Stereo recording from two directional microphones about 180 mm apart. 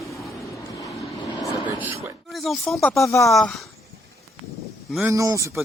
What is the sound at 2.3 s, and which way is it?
Speech, centre (ahead or behind).